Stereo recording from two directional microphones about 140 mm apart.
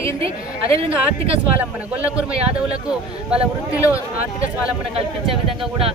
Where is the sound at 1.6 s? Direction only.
10° right (ahead or behind).